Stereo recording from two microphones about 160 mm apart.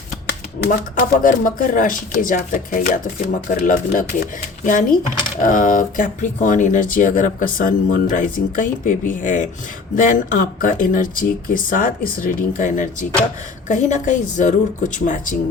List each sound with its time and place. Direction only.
0.9 s speech: 55° left (ahead or behind)